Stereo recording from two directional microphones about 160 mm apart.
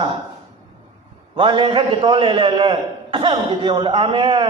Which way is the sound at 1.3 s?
30° right (ahead or behind).